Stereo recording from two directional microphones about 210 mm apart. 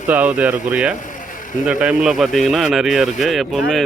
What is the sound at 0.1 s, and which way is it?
A man's voice, 5° right (ahead or behind).